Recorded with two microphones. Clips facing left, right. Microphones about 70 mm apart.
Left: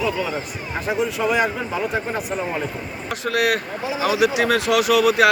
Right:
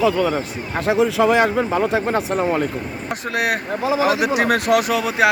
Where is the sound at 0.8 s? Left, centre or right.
Right.